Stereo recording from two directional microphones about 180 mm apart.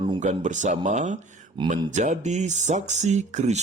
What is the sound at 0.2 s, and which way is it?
Speech, 40° right (ahead or behind).